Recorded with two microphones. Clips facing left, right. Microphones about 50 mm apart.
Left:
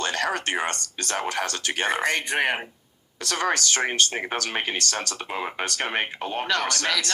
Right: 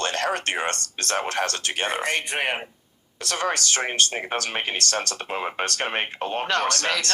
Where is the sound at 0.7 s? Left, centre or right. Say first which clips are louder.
Right 2 dB; right.